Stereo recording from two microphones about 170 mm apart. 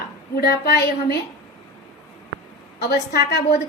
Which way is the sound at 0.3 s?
70° left (ahead or behind).